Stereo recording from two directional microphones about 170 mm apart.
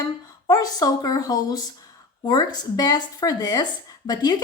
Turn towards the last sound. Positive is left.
turn(degrees=25)  # may be behind; listen again after turning